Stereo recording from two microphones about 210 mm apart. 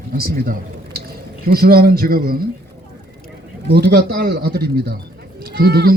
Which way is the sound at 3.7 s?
50° right (ahead or behind).